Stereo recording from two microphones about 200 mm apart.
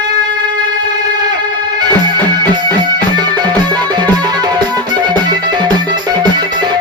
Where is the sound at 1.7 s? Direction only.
20° right (ahead or behind).